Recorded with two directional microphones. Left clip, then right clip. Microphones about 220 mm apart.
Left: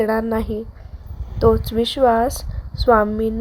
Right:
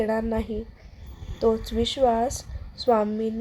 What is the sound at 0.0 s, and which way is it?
A woman's voice, 20° left (ahead or behind).